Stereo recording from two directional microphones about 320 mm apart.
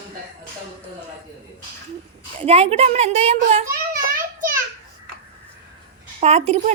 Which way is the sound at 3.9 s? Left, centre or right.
Right.